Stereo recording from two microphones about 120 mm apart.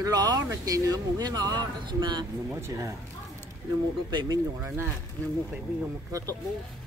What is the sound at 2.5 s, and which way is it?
Speech, 20° right (ahead or behind).